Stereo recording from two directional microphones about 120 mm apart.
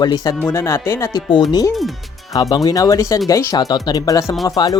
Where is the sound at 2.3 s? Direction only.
35° left (ahead or behind).